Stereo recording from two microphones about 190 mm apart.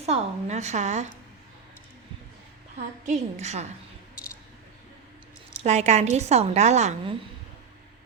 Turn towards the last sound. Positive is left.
turn(degrees=-35)  # may be behind; listen again after turning